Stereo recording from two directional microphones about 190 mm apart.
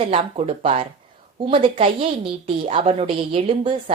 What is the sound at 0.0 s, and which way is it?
A woman's voice, 30° right (ahead or behind).